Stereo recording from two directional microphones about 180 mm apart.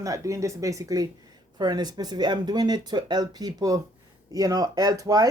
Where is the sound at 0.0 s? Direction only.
20° right (ahead or behind).